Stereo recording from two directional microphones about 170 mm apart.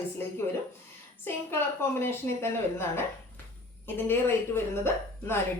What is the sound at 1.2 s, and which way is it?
Speech, 15° left (ahead or behind).